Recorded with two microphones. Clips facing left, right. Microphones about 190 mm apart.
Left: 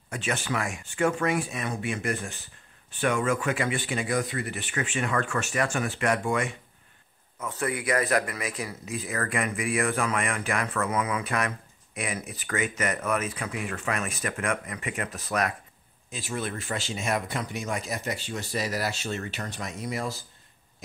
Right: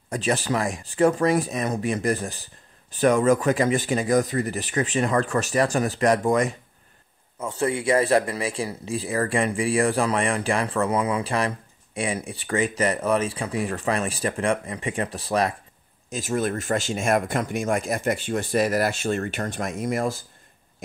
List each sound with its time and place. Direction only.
0.1 s speech: 35° right (ahead or behind)
7.3 s speech: 30° right (ahead or behind)
16.1 s speech: 45° right (ahead or behind)